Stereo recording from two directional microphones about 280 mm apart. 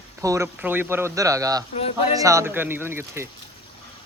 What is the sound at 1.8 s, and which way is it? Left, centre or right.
Speech, left.